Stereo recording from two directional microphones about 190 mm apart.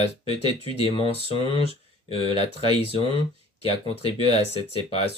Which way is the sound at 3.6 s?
30° left (ahead or behind).